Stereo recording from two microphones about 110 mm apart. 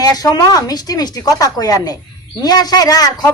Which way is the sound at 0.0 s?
35° left (ahead or behind).